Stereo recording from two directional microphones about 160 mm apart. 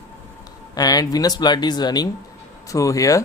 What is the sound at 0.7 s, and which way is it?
Speech, 25° left (ahead or behind).